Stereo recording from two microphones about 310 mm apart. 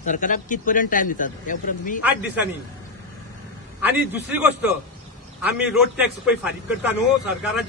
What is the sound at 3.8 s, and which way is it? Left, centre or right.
Speech, centre.